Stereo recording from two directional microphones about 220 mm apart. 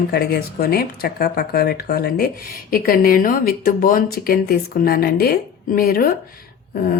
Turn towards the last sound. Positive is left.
turn(degrees=40)  # may be behind; listen again after turning